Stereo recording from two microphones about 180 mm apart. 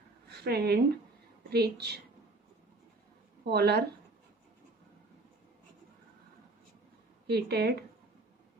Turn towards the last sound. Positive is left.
turn(degrees=-65)  # may be behind; listen again after turning